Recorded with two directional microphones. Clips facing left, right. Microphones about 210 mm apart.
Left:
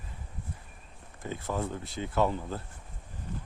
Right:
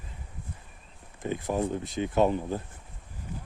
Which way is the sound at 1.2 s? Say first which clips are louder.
Right 5 dB; 15° right (ahead or behind).